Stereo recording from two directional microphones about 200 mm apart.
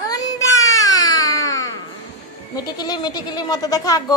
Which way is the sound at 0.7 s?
15° left (ahead or behind).